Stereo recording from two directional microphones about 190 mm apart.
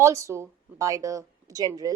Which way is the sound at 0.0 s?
15° right (ahead or behind).